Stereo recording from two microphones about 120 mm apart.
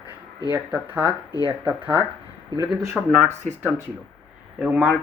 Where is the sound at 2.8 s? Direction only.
10° right (ahead or behind).